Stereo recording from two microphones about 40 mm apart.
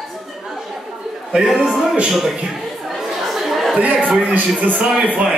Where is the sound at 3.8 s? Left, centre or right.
Right.